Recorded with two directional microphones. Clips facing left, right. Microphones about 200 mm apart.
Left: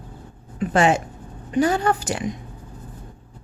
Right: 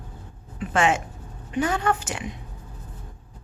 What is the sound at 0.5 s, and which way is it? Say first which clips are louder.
A woman's voice: left 4 dB; 40° left (ahead or behind).